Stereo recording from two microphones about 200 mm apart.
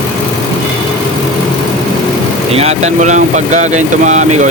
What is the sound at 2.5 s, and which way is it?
Speech, 30° right (ahead or behind).